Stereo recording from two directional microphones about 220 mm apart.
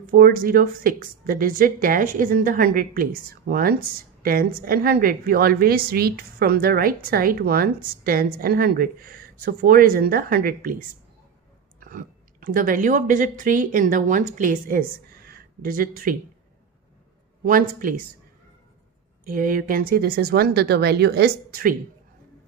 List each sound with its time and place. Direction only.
0.0 s a woman's voice: 40° right (ahead or behind)
11.8 s speech: 40° right (ahead or behind)
17.5 s a woman's voice: 40° right (ahead or behind)
19.2 s speech: 40° right (ahead or behind)